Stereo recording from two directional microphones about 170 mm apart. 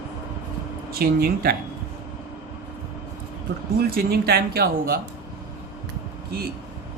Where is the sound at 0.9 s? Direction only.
65° right (ahead or behind).